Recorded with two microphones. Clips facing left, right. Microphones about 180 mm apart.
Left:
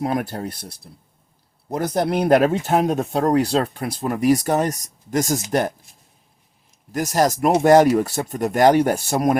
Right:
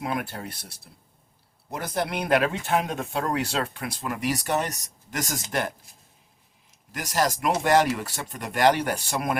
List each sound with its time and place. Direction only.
0.0 s speech: 40° left (ahead or behind)
6.9 s speech: 45° left (ahead or behind)